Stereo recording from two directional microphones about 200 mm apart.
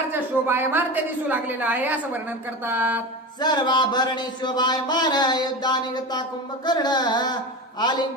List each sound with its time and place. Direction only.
0.1 s a woman's voice: 10° right (ahead or behind)
3.4 s speech: 20° left (ahead or behind)